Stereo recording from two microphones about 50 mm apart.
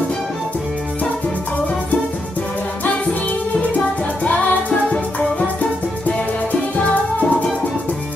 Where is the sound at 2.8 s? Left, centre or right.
Left.